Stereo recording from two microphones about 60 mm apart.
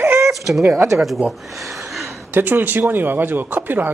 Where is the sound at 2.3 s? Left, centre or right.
Right.